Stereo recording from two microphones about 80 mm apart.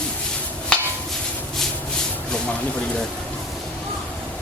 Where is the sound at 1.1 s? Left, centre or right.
Centre.